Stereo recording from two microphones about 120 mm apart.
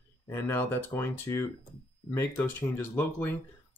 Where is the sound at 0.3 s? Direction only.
20° left (ahead or behind).